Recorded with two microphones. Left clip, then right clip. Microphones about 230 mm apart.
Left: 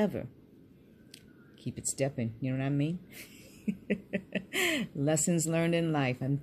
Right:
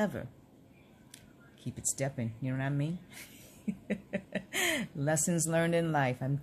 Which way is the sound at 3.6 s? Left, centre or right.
Centre.